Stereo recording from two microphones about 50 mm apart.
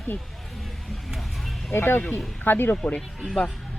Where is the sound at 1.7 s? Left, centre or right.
Left.